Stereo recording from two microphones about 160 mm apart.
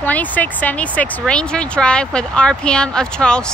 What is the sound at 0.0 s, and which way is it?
Speech, 10° left (ahead or behind).